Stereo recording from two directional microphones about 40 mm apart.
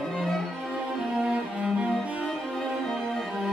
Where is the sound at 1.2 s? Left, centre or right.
Right.